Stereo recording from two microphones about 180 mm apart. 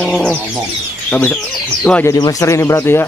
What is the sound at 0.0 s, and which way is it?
Speech, 5° left (ahead or behind).